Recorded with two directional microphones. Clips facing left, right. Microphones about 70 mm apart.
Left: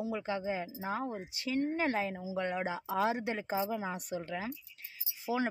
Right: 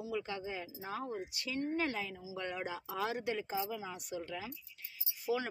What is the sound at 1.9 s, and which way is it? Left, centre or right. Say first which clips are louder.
Speech: left 7 dB; left.